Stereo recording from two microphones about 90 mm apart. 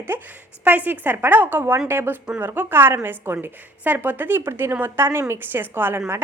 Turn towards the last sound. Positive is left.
turn(degrees=-25)  # may be behind; listen again after turning